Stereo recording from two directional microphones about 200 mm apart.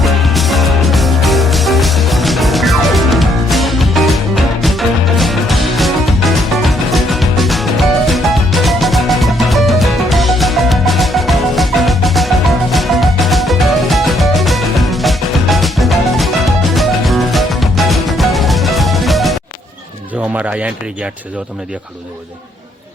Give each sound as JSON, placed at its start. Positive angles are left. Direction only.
{"t": 0.0, "sound": "music", "side_deg": 0}
{"t": 20.3, "sound": "speech", "side_deg": -5}